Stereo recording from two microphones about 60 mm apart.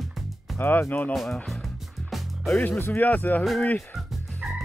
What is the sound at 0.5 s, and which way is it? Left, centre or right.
Speech, left.